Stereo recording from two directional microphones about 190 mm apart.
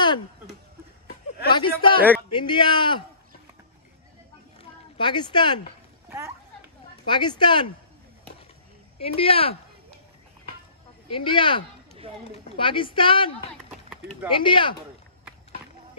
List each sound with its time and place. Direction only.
1.5 s speech: 25° left (ahead or behind)
4.9 s speech: 25° left (ahead or behind)
6.0 s speech: 15° right (ahead or behind)
7.1 s speech: 25° left (ahead or behind)
9.0 s speech: 30° left (ahead or behind)
11.1 s speech: 25° left (ahead or behind)
11.9 s run: 30° right (ahead or behind)
12.3 s speech: 30° left (ahead or behind)
13.7 s a sound: centre (ahead or behind)
14.3 s speech: 25° left (ahead or behind)